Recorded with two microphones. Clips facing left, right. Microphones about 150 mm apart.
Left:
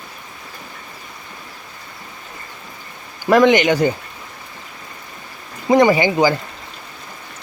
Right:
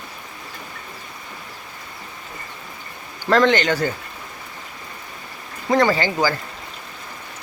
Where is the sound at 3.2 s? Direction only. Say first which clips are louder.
Left 4 dB; 15° left (ahead or behind).